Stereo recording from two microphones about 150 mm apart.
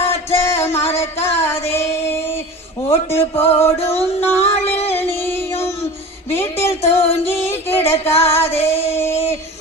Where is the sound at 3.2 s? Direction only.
40° left (ahead or behind).